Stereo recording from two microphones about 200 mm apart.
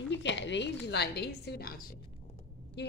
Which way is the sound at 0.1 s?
65° left (ahead or behind).